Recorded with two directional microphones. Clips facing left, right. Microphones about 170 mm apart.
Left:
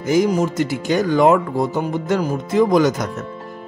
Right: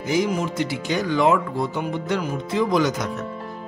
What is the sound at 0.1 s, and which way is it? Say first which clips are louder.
Speech: left 6 dB; 45° left (ahead or behind).